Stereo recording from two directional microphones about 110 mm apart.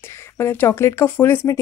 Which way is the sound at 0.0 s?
25° left (ahead or behind).